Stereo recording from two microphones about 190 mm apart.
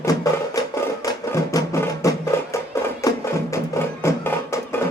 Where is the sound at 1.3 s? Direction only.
15° left (ahead or behind).